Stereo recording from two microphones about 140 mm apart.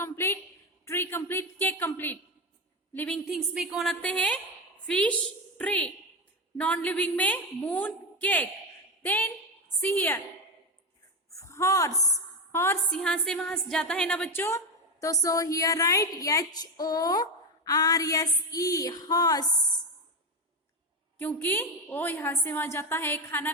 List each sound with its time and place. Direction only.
0.0 s a sound: 15° left (ahead or behind)
0.9 s a woman's voice: 15° left (ahead or behind)
3.2 s a woman's voice: centre (ahead or behind)
4.0 s a woman's voice: 10° left (ahead or behind)
11.3 s a woman's voice: 20° left (ahead or behind)
12.9 s a woman's voice: 5° left (ahead or behind)
15.0 s a woman's voice: 25° left (ahead or behind)
21.2 s a woman's voice: 15° left (ahead or behind)